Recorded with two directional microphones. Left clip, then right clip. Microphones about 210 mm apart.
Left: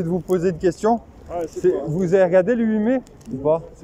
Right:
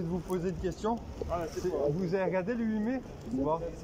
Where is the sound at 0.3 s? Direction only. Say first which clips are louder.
Left 16 dB; 55° left (ahead or behind).